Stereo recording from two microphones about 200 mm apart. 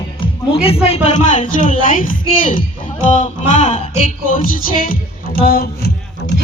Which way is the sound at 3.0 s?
35° left (ahead or behind).